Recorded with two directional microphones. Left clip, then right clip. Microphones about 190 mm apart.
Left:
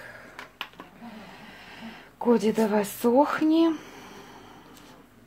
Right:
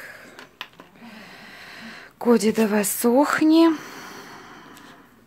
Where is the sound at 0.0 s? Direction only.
45° right (ahead or behind).